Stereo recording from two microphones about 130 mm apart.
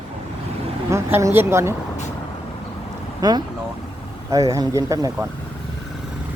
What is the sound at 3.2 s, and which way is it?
A woman's voice, 30° right (ahead or behind).